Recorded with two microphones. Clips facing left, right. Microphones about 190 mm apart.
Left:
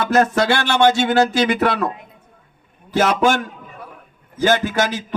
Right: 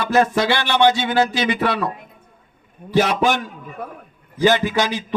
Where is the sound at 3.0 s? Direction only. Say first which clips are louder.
Left 1 dB; 50° left (ahead or behind).